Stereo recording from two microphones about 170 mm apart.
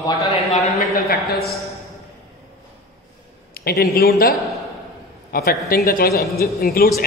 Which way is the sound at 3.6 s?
65° left (ahead or behind).